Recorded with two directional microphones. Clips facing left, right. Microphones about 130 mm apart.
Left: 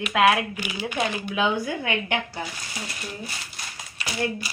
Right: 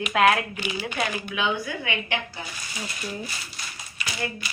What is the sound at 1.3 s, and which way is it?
Speech, 40° left (ahead or behind).